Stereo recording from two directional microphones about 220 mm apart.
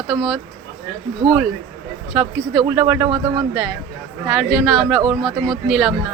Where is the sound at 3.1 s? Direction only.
20° right (ahead or behind).